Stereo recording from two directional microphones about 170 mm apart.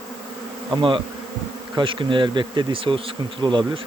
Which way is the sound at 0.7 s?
30° right (ahead or behind).